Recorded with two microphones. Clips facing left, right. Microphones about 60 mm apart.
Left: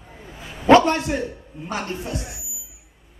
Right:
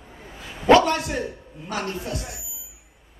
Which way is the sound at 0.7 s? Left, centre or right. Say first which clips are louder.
Left 2 dB; left.